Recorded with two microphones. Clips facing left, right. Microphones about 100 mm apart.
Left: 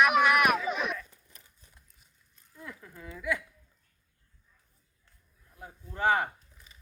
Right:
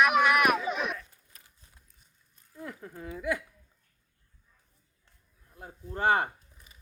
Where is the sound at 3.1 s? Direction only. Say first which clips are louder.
Right 1 dB; 40° right (ahead or behind).